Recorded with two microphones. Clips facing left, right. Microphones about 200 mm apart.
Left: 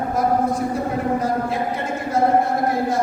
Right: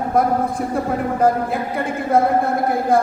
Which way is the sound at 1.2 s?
55° right (ahead or behind).